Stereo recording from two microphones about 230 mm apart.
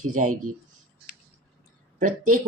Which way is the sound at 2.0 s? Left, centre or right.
Right.